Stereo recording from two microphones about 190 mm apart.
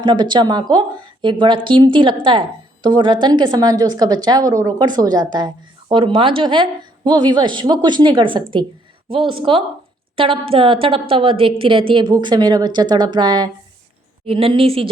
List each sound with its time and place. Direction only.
0.0 s a woman's voice: 25° right (ahead or behind)